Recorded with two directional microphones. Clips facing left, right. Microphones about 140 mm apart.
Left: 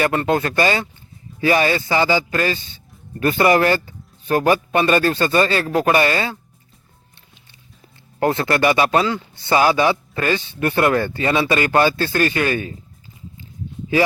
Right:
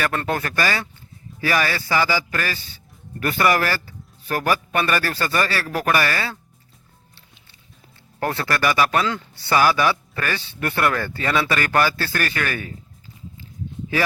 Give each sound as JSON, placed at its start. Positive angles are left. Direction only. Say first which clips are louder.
{"t": 0.2, "sound": "speech", "louder": "left 5 dB", "side_deg": 20}
{"t": 8.2, "sound": "speech", "louder": "left 5 dB", "side_deg": 20}
{"t": 9.0, "sound": "speech", "louder": "left 3 dB", "side_deg": 15}